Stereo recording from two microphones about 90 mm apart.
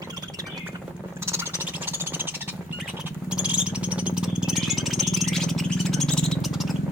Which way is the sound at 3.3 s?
10° right (ahead or behind).